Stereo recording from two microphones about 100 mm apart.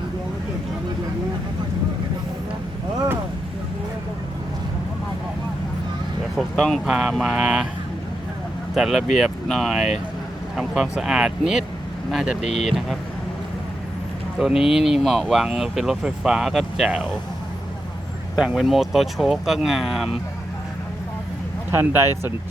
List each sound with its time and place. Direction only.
6.3 s speech: centre (ahead or behind)
8.7 s speech: centre (ahead or behind)
14.3 s speech: 5° right (ahead or behind)
18.3 s speech: 5° right (ahead or behind)
21.7 s speech: 25° right (ahead or behind)